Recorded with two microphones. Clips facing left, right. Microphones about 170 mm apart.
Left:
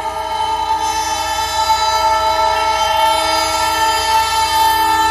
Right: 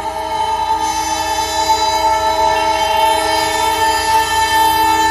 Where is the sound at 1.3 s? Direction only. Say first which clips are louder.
Right 1 dB; 20° right (ahead or behind).